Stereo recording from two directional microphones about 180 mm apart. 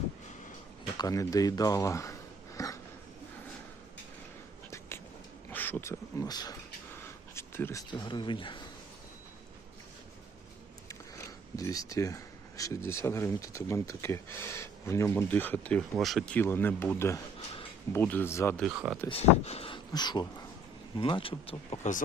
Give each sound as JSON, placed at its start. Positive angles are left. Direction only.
{"t": 0.9, "sound": "speech", "side_deg": 20}
{"t": 2.6, "sound": "a sound", "side_deg": 20}
{"t": 4.9, "sound": "a sound", "side_deg": 15}
{"t": 5.5, "sound": "speech", "side_deg": 10}
{"t": 10.8, "sound": "speech", "side_deg": 15}
{"t": 18.6, "sound": "speech", "side_deg": -5}
{"t": 19.0, "sound": "speech", "side_deg": 35}